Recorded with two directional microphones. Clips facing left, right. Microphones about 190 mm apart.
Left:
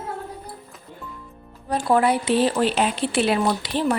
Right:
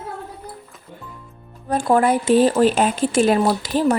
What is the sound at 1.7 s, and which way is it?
Speech, 50° right (ahead or behind).